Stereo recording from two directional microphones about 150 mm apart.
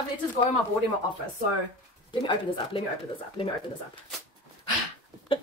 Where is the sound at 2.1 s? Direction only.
35° left (ahead or behind).